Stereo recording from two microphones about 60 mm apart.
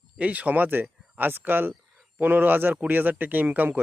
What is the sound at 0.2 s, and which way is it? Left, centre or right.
Speech, right.